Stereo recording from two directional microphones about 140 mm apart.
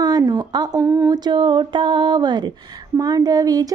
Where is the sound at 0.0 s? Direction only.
30° right (ahead or behind).